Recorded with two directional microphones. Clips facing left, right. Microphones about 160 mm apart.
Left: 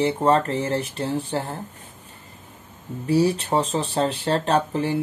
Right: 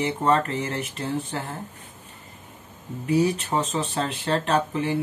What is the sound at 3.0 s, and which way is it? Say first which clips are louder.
Speech: left 2 dB; 35° left (ahead or behind).